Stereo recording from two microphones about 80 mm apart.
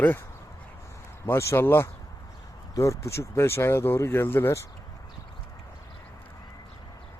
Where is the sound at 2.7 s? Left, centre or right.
Left.